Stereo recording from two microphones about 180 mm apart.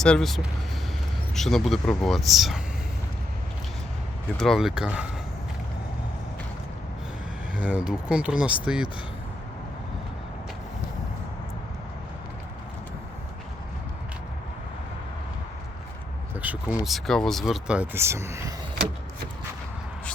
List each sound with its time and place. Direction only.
0.0 s speech: 5° left (ahead or behind)
4.4 s speech: centre (ahead or behind)
7.6 s speech: 5° right (ahead or behind)
16.4 s speech: 10° right (ahead or behind)